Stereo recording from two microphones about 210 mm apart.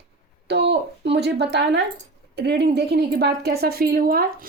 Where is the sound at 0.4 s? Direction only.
55° right (ahead or behind).